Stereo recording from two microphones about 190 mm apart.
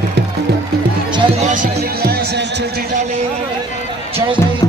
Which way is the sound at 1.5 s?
55° right (ahead or behind).